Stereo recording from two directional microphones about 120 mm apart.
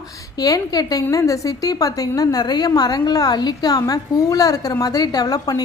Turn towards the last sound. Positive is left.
turn(degrees=30)  # may be behind; listen again after turning